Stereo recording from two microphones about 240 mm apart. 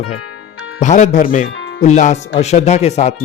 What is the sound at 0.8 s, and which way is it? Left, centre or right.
Speech, left.